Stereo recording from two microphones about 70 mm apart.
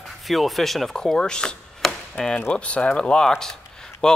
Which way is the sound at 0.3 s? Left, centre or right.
Centre.